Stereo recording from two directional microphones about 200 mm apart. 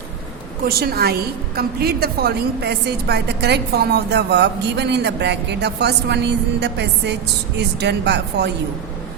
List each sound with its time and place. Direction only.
0.6 s a woman's voice: 50° right (ahead or behind)